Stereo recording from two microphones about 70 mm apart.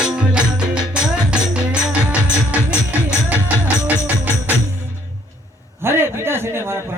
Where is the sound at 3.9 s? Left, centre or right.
Right.